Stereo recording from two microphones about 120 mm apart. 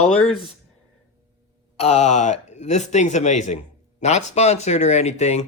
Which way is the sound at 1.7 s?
60° left (ahead or behind).